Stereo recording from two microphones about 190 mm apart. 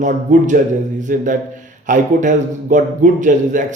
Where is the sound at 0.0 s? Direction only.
40° right (ahead or behind).